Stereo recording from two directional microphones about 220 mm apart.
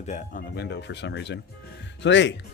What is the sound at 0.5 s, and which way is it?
Speech, 50° left (ahead or behind).